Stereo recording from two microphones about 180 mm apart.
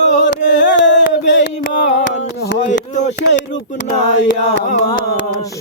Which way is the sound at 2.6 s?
40° left (ahead or behind).